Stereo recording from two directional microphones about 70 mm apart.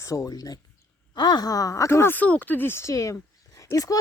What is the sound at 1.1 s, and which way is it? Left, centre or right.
Speech, left.